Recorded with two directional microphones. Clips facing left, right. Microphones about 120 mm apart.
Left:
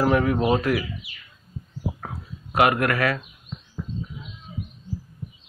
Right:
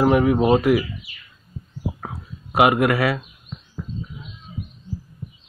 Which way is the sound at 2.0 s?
15° right (ahead or behind).